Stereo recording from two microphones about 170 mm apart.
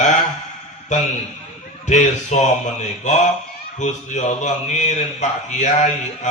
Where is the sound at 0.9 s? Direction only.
45° left (ahead or behind).